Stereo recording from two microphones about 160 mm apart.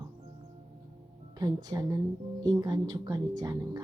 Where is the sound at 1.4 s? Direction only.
25° right (ahead or behind).